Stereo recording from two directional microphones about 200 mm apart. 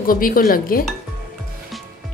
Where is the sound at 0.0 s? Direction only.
45° left (ahead or behind).